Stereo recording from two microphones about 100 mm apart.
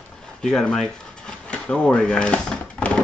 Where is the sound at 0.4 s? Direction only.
5° left (ahead or behind).